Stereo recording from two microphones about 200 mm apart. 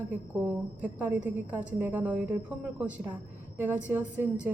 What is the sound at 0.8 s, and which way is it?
A woman's voice, 5° right (ahead or behind).